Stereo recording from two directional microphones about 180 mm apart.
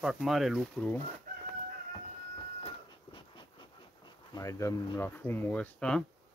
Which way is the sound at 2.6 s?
30° left (ahead or behind).